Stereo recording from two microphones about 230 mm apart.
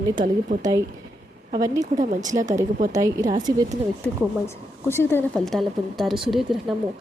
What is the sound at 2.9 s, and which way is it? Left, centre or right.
Speech, centre.